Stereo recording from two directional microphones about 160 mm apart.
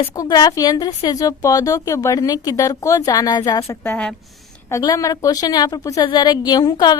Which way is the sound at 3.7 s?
10° left (ahead or behind).